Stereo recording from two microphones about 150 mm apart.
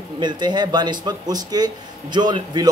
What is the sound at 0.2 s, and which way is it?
A man's voice, 30° right (ahead or behind).